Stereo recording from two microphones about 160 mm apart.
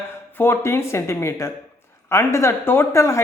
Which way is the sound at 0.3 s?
15° left (ahead or behind).